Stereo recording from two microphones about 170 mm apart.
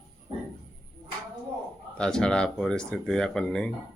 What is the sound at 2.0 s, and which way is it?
Speech, 5° left (ahead or behind).